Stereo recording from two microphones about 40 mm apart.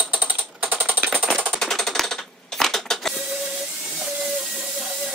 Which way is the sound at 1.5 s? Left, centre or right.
Centre.